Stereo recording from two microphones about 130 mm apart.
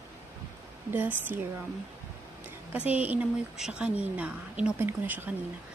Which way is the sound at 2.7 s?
10° right (ahead or behind).